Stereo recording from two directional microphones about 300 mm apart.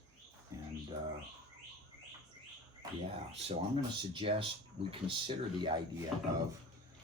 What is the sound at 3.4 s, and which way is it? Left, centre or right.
Speech, centre.